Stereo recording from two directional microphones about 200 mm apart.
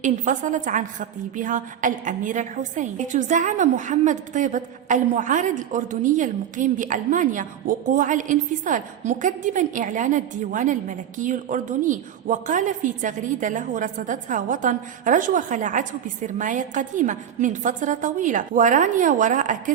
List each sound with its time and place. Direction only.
0.0 s a woman's voice: 40° right (ahead or behind)